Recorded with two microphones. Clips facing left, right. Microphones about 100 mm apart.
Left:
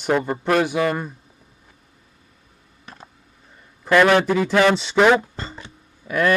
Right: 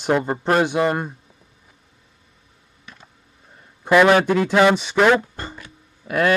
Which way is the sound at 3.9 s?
10° right (ahead or behind).